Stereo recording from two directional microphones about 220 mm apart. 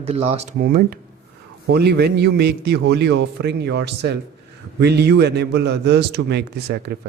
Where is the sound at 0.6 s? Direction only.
40° right (ahead or behind).